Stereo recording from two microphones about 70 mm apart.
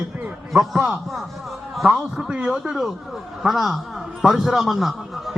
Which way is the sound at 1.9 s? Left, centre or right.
Centre.